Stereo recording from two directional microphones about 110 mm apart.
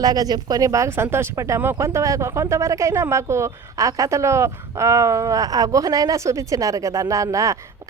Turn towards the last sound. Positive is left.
turn(degrees=-30)  # may be behind; listen again after turning